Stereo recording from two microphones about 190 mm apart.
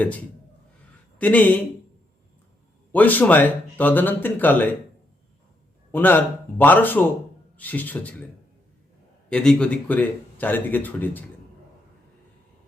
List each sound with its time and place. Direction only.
0.0 s speech: 10° left (ahead or behind)
2.9 s speech: 10° left (ahead or behind)
5.9 s speech: 10° left (ahead or behind)
9.3 s speech: 5° left (ahead or behind)